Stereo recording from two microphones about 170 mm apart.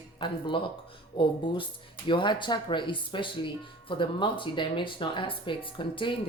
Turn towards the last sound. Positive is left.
turn(degrees=30)  # may be behind; listen again after turning